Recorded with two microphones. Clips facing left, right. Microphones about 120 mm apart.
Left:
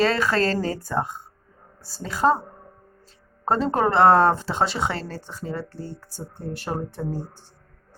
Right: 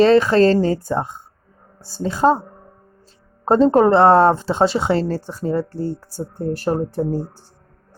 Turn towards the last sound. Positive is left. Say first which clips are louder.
# right 9 dB
turn(degrees=-40)  # may be behind; listen again after turning